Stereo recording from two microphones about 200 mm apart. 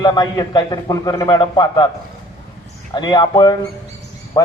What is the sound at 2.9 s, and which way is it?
Speech, 20° left (ahead or behind).